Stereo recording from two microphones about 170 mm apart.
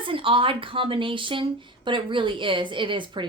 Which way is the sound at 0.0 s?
30° right (ahead or behind).